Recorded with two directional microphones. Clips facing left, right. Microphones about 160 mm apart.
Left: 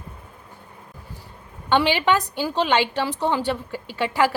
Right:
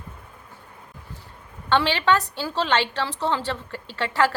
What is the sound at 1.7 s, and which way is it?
A woman's voice, 15° left (ahead or behind).